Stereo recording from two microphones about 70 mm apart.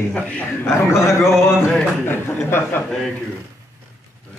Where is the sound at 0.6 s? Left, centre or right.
Left.